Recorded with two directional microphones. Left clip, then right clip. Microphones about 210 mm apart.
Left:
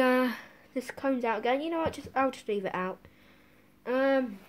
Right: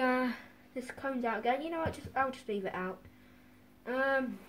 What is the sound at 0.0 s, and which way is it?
Speech, 45° left (ahead or behind).